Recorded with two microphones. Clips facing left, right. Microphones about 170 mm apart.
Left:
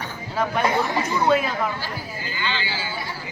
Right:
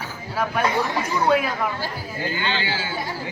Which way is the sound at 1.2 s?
10° right (ahead or behind).